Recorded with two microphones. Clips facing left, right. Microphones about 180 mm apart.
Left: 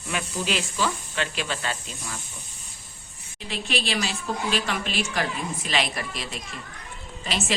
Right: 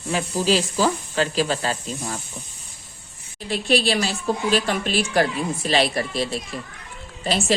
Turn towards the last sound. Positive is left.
turn(degrees=-40)  # may be behind; listen again after turning